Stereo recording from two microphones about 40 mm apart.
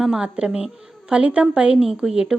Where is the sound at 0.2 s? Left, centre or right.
Right.